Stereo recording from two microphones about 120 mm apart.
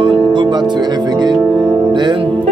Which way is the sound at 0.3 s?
40° right (ahead or behind).